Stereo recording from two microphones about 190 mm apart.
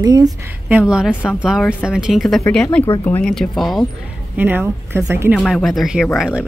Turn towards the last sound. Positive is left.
turn(degrees=-5)  # may be behind; listen again after turning